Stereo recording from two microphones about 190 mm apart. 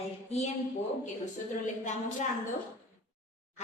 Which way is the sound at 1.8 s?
40° left (ahead or behind).